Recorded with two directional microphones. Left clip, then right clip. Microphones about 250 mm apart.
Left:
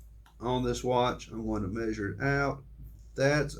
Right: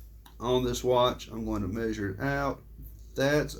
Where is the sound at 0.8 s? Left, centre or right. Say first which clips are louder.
Right 3 dB; right.